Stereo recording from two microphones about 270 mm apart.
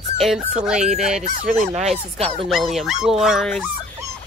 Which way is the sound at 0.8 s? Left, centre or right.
Right.